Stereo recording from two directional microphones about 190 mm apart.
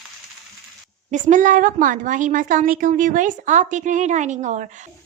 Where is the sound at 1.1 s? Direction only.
40° right (ahead or behind).